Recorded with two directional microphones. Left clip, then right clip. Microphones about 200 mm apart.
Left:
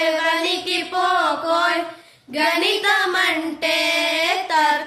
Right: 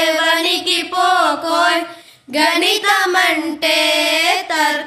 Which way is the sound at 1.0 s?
55° right (ahead or behind).